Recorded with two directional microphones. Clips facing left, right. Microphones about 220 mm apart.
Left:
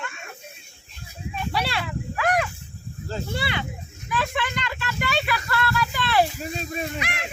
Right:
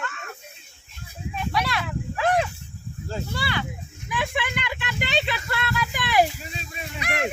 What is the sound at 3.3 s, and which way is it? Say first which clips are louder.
Speech: left 1 dB; 20° left (ahead or behind).